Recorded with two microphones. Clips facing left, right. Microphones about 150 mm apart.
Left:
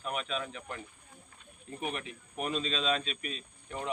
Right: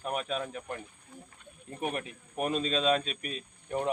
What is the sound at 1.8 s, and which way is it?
A man's voice, 45° right (ahead or behind).